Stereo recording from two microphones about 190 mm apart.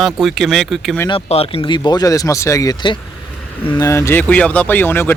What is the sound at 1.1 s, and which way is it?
Speech, 30° left (ahead or behind).